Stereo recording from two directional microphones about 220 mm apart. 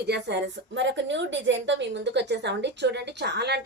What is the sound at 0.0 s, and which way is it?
A woman's voice, 50° right (ahead or behind).